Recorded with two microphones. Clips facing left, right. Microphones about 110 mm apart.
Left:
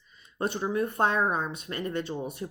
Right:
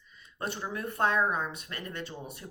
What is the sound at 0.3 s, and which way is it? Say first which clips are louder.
Speech: left 8 dB; 25° left (ahead or behind).